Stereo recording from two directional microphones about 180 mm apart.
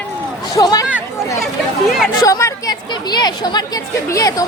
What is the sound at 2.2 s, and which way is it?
Speech, 20° left (ahead or behind).